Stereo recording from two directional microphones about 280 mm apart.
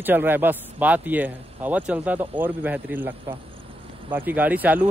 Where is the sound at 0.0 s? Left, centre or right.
Centre.